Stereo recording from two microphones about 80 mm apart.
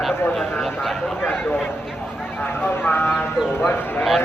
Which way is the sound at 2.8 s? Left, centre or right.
Left.